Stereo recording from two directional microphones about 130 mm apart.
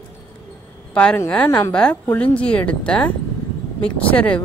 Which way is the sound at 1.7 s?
10° left (ahead or behind).